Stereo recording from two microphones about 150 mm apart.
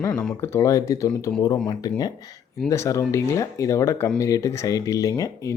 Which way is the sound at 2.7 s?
20° left (ahead or behind).